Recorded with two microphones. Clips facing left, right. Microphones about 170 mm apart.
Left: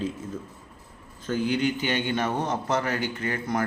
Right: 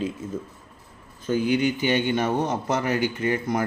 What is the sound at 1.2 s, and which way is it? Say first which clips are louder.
A man's voice: right 3 dB; 15° right (ahead or behind).